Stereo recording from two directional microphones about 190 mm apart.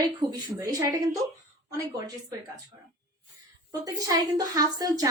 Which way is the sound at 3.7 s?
20° right (ahead or behind).